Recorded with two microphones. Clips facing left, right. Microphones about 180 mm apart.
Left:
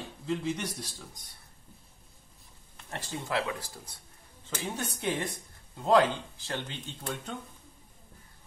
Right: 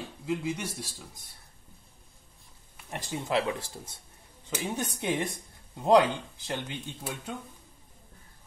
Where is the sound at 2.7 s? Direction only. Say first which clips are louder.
Right 2 dB; 15° right (ahead or behind).